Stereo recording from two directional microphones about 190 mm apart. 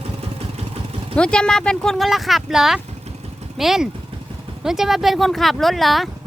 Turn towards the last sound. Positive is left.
turn(degrees=0)  # may be behind; listen again after turning